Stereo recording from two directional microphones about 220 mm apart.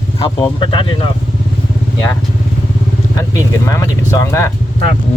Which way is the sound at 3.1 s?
15° left (ahead or behind).